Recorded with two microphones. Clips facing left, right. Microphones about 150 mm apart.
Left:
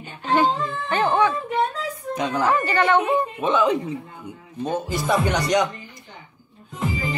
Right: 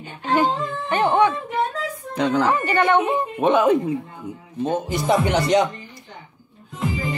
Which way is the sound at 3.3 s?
60° right (ahead or behind).